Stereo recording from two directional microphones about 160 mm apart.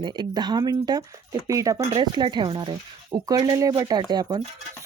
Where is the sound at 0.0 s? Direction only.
30° right (ahead or behind).